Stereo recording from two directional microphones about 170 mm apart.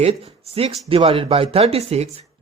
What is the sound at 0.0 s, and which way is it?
Speech, 35° right (ahead or behind).